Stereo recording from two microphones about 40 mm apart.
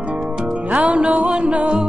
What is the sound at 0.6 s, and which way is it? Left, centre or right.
Music, right.